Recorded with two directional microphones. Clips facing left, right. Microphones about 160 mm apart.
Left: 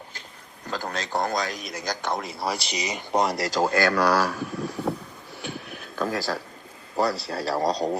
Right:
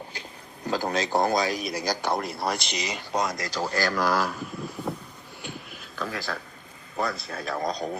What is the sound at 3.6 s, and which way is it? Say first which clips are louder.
Speech: left 4 dB; 55° left (ahead or behind).